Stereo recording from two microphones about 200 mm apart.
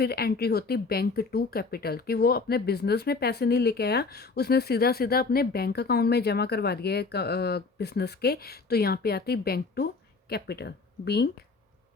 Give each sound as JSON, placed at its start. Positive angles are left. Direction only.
{"t": 0.0, "sound": "speech", "side_deg": 50}